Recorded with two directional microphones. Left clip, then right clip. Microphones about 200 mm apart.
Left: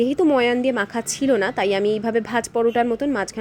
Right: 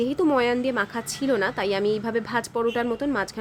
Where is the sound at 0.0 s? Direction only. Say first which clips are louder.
Left 4 dB; 15° left (ahead or behind).